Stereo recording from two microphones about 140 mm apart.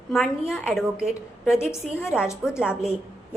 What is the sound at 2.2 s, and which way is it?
Speech, 5° right (ahead or behind).